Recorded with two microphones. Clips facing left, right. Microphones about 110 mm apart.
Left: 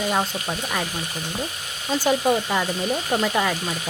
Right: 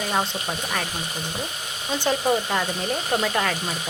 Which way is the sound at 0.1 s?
Centre (ahead or behind).